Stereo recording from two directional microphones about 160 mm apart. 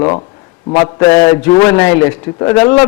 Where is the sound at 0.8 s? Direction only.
20° left (ahead or behind).